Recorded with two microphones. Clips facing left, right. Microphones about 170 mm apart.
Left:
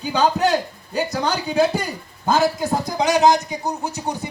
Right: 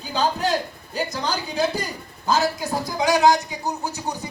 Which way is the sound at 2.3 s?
50° left (ahead or behind).